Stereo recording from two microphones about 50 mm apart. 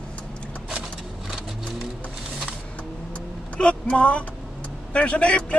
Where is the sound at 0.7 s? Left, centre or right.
Centre.